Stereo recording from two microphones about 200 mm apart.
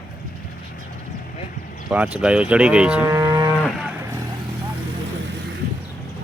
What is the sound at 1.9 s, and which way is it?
Speech, 5° right (ahead or behind).